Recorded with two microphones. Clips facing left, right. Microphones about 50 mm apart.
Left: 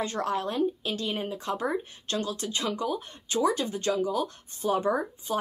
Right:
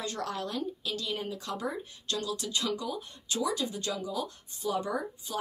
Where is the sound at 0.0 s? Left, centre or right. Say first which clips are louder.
Left 6 dB; left.